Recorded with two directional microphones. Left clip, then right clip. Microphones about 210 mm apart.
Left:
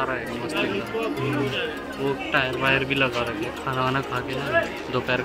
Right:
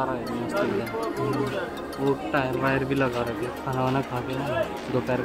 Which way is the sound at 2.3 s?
30° right (ahead or behind).